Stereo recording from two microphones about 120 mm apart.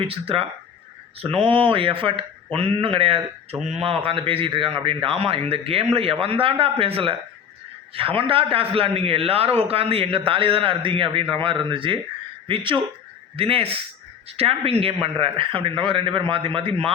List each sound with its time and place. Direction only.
0.1 s a man's voice: 50° right (ahead or behind)